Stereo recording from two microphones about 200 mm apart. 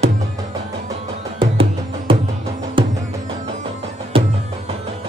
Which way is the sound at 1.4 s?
25° right (ahead or behind).